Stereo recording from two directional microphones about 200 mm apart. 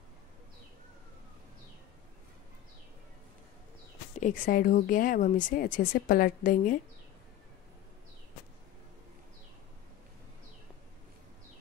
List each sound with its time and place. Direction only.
4.2 s speech: 40° left (ahead or behind)